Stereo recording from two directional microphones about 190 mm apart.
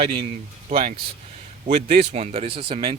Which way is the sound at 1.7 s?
30° right (ahead or behind).